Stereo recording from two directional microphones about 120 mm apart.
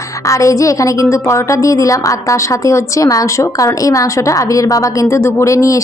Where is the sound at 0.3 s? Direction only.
25° left (ahead or behind).